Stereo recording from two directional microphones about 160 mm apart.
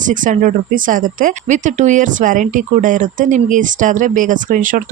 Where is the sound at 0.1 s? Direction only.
55° right (ahead or behind).